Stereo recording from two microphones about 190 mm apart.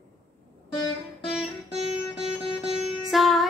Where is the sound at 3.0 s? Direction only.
Centre (ahead or behind).